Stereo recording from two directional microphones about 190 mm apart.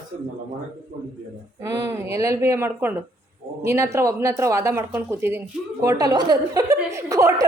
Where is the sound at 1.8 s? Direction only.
15° right (ahead or behind).